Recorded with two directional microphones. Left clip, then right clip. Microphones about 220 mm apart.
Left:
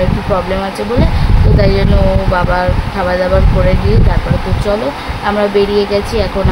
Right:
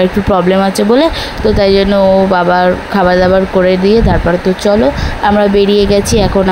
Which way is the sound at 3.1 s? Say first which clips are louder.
Right 4 dB; 35° right (ahead or behind).